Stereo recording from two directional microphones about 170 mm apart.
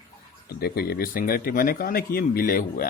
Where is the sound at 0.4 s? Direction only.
70° left (ahead or behind).